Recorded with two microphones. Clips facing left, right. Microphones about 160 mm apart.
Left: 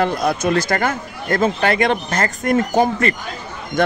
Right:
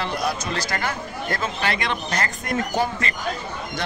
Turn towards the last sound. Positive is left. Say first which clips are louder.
# left 9 dB
turn(degrees=55)  # may be behind; listen again after turning